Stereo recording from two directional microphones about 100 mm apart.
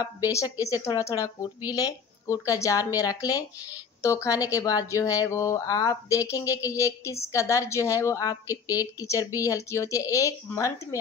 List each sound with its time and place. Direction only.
0.0 s speech: 35° left (ahead or behind)